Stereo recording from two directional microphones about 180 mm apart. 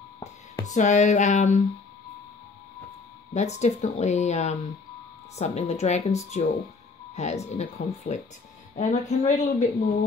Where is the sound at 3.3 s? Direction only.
40° left (ahead or behind).